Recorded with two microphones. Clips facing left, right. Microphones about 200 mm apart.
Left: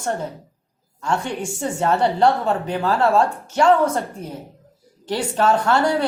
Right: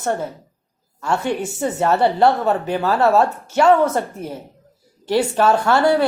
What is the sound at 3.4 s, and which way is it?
A woman's voice, 10° right (ahead or behind).